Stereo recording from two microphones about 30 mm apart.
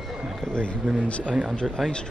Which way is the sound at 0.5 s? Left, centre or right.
Left.